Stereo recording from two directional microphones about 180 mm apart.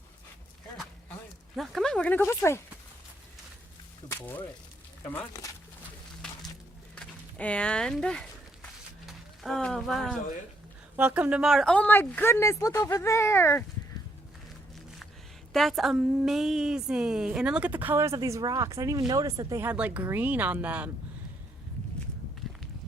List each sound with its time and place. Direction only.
1.5 s speech: centre (ahead or behind)
4.1 s speech: 10° left (ahead or behind)
6.9 s a woman's voice: 5° left (ahead or behind)
15.5 s a woman's voice: centre (ahead or behind)